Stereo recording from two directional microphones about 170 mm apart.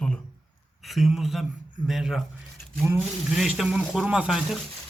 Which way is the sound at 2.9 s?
10° right (ahead or behind).